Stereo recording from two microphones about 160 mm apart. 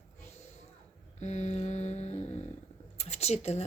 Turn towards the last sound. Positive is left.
turn(degrees=40)  # may be behind; listen again after turning